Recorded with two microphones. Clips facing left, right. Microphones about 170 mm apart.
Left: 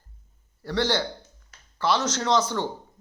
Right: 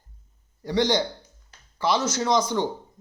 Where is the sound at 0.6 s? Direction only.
15° right (ahead or behind).